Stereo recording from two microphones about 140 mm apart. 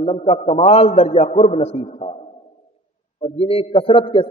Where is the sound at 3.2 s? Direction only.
45° left (ahead or behind).